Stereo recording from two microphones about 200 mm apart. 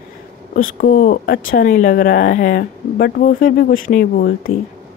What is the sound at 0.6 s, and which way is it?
Speech, 45° left (ahead or behind).